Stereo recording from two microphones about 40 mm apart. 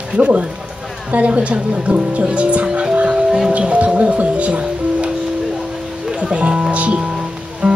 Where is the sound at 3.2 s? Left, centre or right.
Centre.